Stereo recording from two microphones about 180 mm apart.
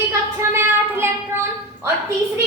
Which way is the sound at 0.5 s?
15° right (ahead or behind).